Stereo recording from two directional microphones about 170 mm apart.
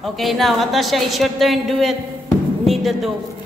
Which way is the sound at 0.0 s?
Centre (ahead or behind).